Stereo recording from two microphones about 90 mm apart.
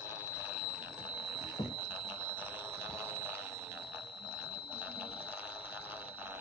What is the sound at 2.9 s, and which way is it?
Telephone bell ringing, 25° right (ahead or behind).